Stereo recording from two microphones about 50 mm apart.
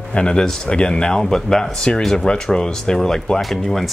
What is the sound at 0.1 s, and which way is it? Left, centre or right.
Speech, centre.